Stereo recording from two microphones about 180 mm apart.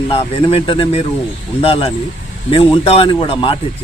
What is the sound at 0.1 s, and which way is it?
A man's voice, 30° left (ahead or behind).